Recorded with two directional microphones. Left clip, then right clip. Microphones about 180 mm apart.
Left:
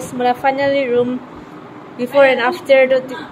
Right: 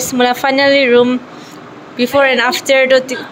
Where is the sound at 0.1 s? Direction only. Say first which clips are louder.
Right 3 dB; 15° right (ahead or behind).